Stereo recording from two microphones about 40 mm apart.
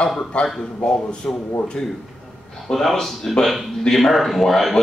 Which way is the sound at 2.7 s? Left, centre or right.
Centre.